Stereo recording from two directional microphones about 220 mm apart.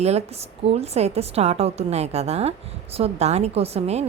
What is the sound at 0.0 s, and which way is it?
A woman's voice, 30° right (ahead or behind).